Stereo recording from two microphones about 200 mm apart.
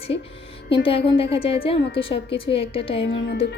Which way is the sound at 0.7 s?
30° left (ahead or behind).